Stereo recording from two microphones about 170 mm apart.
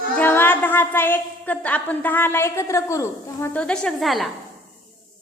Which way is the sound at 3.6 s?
5° left (ahead or behind).